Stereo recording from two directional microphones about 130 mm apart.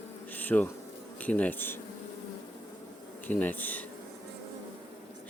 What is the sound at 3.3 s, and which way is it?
Speech, 15° left (ahead or behind).